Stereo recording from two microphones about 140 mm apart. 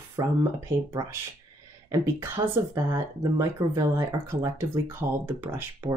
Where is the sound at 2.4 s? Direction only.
35° right (ahead or behind).